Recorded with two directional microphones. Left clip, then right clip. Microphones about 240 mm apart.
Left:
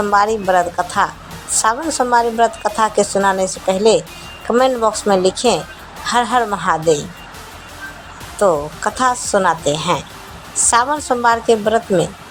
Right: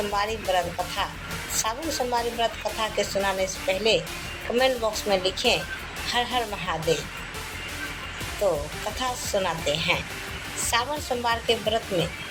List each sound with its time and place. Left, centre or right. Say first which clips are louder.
0.1 s a woman's voice: left 14 dB; left
9.0 s a woman's voice: left 12 dB; left